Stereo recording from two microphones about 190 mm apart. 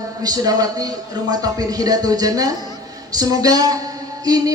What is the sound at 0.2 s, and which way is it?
Speech, 20° right (ahead or behind).